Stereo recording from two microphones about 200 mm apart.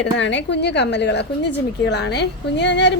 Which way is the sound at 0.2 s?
65° left (ahead or behind).